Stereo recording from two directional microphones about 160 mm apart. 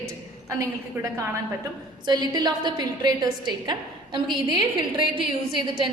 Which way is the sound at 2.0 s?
25° right (ahead or behind).